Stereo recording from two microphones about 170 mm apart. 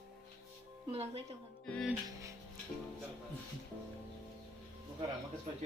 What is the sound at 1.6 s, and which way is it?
Music, 5° left (ahead or behind).